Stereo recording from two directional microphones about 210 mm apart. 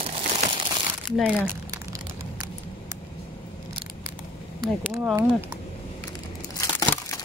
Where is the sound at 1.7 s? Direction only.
15° right (ahead or behind).